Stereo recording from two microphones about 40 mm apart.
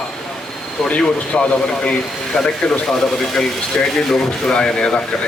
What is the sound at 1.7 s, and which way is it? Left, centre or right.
Speech, left.